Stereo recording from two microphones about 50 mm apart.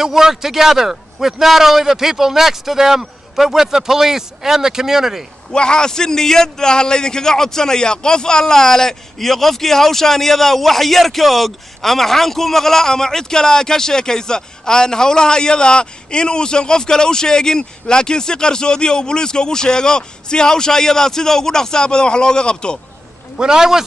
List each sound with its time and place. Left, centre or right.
0.0 s a man's voice: centre
5.5 s a man's voice: centre
23.4 s a man's voice: centre